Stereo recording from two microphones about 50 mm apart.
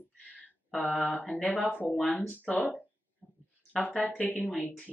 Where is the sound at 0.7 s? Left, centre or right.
Left.